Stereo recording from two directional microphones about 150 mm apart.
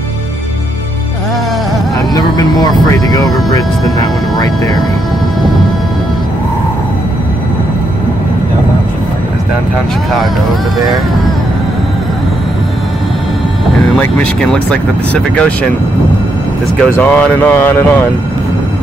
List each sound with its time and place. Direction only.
2.0 s a sound: 25° left (ahead or behind)
3.3 s speech: centre (ahead or behind)
13.9 s speech: 10° left (ahead or behind)
16.8 s speech: 10° left (ahead or behind)